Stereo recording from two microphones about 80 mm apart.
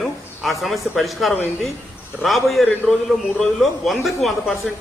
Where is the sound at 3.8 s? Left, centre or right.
Centre.